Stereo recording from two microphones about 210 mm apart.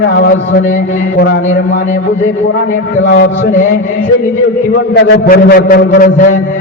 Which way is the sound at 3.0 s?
60° left (ahead or behind).